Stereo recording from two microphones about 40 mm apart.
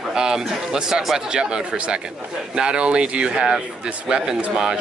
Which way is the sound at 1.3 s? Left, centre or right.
Right.